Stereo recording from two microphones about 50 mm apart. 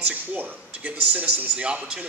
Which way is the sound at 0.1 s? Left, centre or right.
Right.